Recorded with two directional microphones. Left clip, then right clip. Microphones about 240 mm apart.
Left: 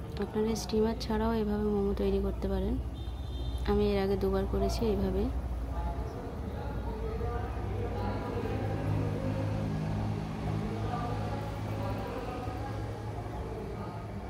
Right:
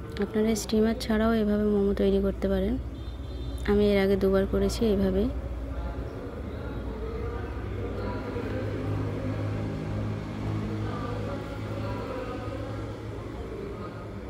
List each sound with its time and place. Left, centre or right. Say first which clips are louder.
0.2 s a woman's voice: right 5 dB; centre